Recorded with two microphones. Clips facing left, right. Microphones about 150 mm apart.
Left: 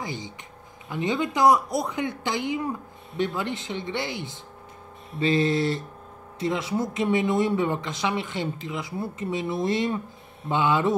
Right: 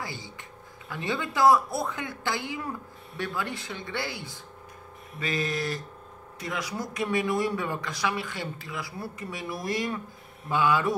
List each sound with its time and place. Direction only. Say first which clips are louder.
0.0 s speech: left 4 dB; 20° left (ahead or behind)